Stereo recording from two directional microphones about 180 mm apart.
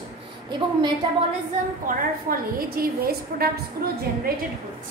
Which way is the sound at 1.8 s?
55° right (ahead or behind).